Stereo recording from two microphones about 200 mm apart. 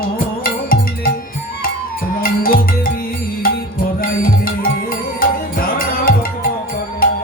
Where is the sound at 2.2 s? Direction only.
45° left (ahead or behind).